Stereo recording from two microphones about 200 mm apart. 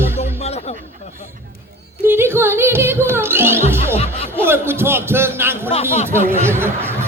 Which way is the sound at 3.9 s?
30° left (ahead or behind).